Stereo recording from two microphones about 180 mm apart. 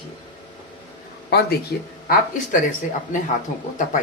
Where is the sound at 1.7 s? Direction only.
60° left (ahead or behind).